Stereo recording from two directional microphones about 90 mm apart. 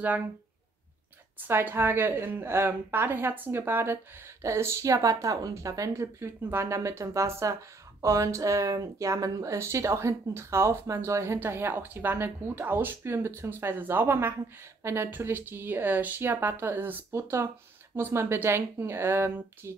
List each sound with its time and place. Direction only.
1.4 s a woman's voice: 20° right (ahead or behind)